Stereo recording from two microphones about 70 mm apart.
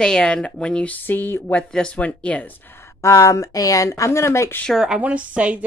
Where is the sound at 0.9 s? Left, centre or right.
Left.